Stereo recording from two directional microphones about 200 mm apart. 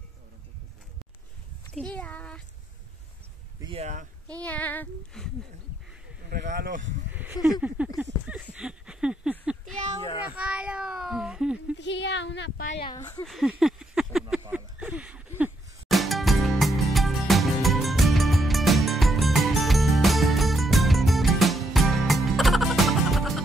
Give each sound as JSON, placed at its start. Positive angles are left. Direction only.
{"t": 1.7, "sound": "a child's voice", "side_deg": 5}
{"t": 3.6, "sound": "speech", "side_deg": -30}
{"t": 4.3, "sound": "speech", "side_deg": 5}
{"t": 6.5, "sound": "speech", "side_deg": -40}
{"t": 7.1, "sound": "a sound", "side_deg": -10}
{"t": 7.3, "sound": "speech", "side_deg": 20}
{"t": 7.6, "sound": "speech", "side_deg": -5}
{"t": 8.0, "sound": "a sound", "side_deg": -10}
{"t": 11.8, "sound": "speech", "side_deg": 60}
{"t": 12.7, "sound": "speech", "side_deg": 25}
{"t": 13.2, "sound": "a sound", "side_deg": 0}
{"t": 14.4, "sound": "music", "side_deg": -10}